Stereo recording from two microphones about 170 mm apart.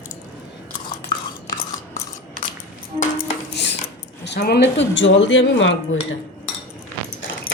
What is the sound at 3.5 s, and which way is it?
Cutlery, 85° left.